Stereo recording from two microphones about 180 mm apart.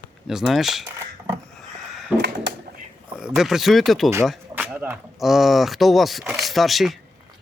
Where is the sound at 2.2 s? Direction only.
70° right (ahead or behind).